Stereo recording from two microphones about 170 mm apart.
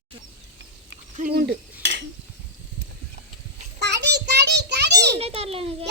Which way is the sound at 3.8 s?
80° right.